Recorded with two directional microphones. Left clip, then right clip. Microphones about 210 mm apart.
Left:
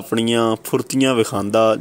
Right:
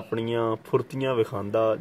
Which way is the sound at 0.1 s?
30° left (ahead or behind).